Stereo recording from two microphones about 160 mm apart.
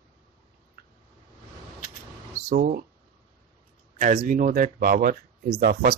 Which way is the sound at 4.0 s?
55° right (ahead or behind).